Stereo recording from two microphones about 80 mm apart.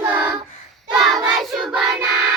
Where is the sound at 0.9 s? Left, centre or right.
Centre.